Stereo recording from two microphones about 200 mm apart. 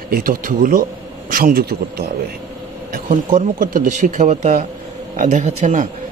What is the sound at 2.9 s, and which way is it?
Speech, 40° right (ahead or behind).